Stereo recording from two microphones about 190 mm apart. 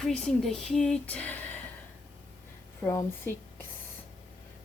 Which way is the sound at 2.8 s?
15° left (ahead or behind).